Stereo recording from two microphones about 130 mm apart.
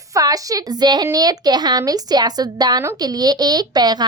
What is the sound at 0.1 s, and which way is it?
A woman's voice, 30° right (ahead or behind).